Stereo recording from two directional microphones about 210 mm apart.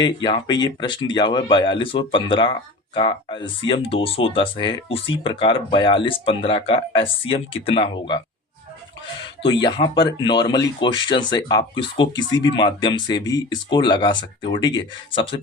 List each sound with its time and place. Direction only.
0.0 s speech: 20° left (ahead or behind)
9.4 s speech: 20° left (ahead or behind)